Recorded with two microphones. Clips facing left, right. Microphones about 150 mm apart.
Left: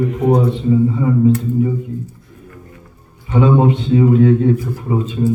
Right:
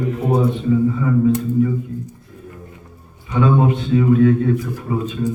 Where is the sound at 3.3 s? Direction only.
25° left (ahead or behind).